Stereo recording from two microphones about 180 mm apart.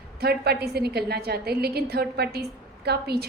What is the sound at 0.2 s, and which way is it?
A woman's voice, 60° right (ahead or behind).